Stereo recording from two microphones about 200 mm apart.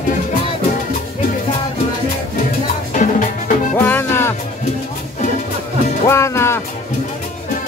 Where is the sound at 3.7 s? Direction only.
10° left (ahead or behind).